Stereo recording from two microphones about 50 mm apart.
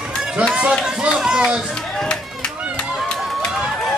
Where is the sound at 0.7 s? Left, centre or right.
Centre.